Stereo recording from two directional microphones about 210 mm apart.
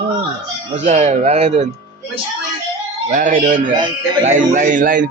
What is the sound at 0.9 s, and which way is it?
Speech, 35° right (ahead or behind).